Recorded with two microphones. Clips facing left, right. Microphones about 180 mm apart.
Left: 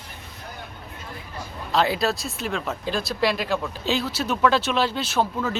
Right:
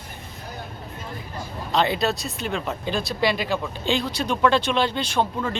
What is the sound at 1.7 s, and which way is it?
Speech, centre (ahead or behind).